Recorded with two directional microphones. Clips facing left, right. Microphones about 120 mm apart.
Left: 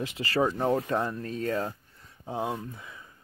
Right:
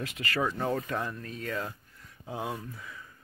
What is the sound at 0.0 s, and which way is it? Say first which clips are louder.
Speech: left 4 dB; 30° left (ahead or behind).